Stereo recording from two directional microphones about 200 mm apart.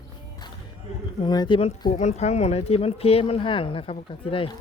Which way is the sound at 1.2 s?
20° left (ahead or behind).